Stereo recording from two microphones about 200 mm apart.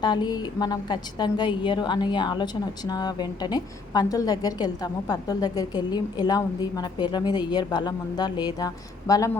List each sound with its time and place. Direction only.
0.0 s a woman's voice: 20° left (ahead or behind)